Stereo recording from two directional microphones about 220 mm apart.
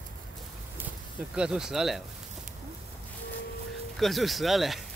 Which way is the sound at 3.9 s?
Centre (ahead or behind).